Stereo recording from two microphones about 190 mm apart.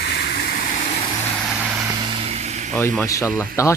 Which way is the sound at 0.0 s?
60° left (ahead or behind).